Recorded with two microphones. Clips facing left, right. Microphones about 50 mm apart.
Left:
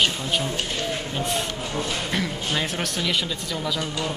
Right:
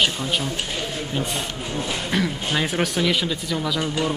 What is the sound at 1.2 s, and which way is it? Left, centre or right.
Speech, centre.